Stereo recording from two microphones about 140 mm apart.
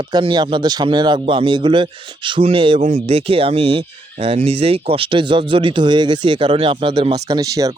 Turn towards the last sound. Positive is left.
turn(degrees=-25)  # may be behind; listen again after turning